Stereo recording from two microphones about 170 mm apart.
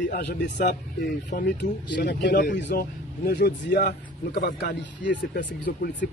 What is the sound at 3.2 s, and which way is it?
A man's voice, 75° left (ahead or behind).